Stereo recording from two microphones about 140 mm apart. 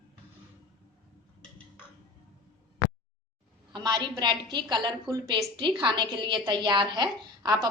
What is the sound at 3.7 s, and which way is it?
A woman's voice, 30° right (ahead or behind).